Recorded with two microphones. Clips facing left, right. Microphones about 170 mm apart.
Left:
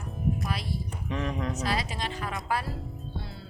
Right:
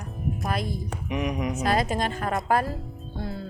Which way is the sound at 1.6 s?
50° right (ahead or behind).